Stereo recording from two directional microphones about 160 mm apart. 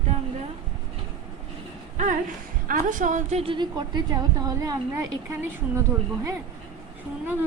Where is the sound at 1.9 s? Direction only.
50° right (ahead or behind); by 6.4 s 20° right (ahead or behind).